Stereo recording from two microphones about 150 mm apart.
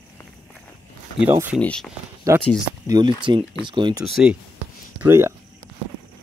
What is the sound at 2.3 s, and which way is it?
Speech, 20° right (ahead or behind).